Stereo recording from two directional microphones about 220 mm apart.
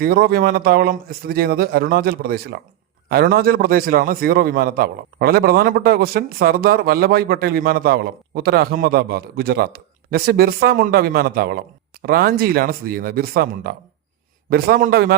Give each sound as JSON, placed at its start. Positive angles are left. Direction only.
{"t": 0.0, "sound": "a man's voice", "side_deg": -45}